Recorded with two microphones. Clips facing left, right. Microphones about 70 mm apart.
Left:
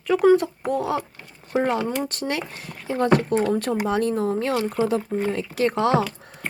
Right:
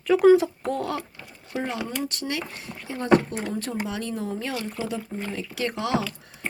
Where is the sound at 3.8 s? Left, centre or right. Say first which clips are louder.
Left 8 dB; left.